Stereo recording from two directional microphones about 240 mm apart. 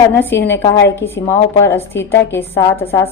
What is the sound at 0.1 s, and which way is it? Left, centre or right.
A woman's voice, centre.